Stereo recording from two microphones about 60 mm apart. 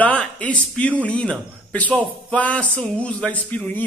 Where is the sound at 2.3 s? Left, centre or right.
Left.